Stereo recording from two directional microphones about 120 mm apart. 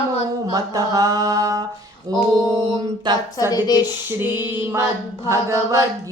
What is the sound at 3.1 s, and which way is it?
Mantra, 40° right (ahead or behind).